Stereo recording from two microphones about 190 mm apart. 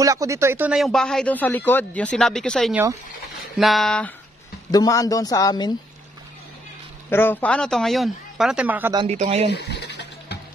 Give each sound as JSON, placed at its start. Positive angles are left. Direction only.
{"t": 0.0, "sound": "speech", "side_deg": -15}
{"t": 2.7, "sound": "speech", "side_deg": -10}
{"t": 3.5, "sound": "speech", "side_deg": 0}
{"t": 4.6, "sound": "speech", "side_deg": 20}
{"t": 7.1, "sound": "speech", "side_deg": 10}
{"t": 8.9, "sound": "speech", "side_deg": -35}
{"t": 9.5, "sound": "music", "side_deg": 60}